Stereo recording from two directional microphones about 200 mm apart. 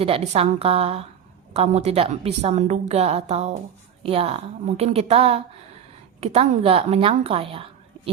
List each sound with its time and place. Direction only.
0.0 s a woman's voice: 30° right (ahead or behind)